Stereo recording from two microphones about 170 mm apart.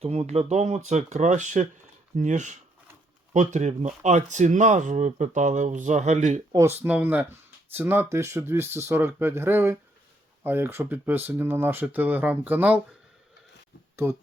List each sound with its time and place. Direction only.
0.0 s speech: 40° right (ahead or behind)
6.5 s speech: 15° right (ahead or behind)
13.9 s speech: 15° right (ahead or behind)